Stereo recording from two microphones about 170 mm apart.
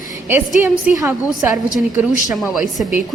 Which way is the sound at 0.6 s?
10° right (ahead or behind).